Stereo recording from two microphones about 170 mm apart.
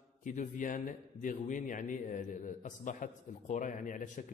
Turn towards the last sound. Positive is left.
turn(degrees=50)  # may be behind; listen again after turning